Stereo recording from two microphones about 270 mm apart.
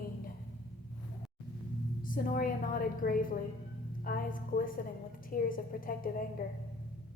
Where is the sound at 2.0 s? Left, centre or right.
Left.